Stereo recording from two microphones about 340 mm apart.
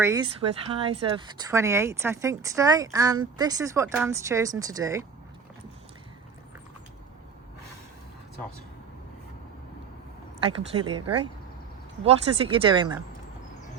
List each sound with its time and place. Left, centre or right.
0.0 s speech: centre
10.4 s speech: centre
11.0 s speech: right
12.0 s speech: centre